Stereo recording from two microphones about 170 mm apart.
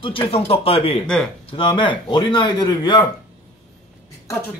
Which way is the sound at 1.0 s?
5° left (ahead or behind).